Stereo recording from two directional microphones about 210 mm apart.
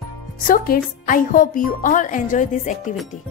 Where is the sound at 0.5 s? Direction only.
40° left (ahead or behind).